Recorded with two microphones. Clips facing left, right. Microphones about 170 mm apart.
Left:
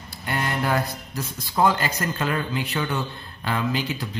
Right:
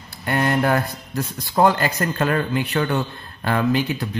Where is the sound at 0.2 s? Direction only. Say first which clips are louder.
Right 6 dB; 60° right (ahead or behind).